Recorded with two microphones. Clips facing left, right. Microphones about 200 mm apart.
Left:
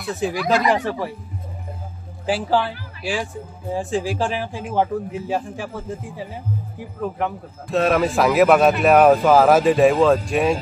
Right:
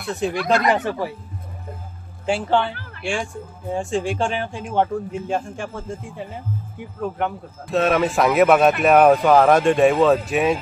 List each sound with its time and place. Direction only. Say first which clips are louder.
0.0 s speech: even; centre (ahead or behind)
2.2 s speech: even; centre (ahead or behind)